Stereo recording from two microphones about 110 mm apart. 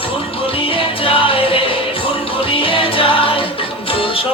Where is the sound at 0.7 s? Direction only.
55° left (ahead or behind).